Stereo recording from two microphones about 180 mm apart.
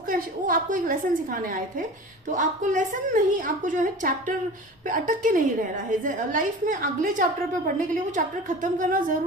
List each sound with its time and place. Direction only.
0.1 s a woman's voice: 50° right (ahead or behind)
8.6 s a woman's voice: 45° right (ahead or behind)